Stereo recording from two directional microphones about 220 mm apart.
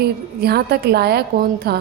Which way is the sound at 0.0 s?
45° right (ahead or behind).